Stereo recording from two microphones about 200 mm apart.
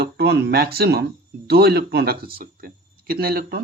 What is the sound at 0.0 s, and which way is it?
Speech, 55° right (ahead or behind).